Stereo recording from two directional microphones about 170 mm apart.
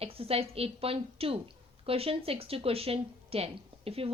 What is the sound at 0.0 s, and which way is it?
Speech, 35° right (ahead or behind).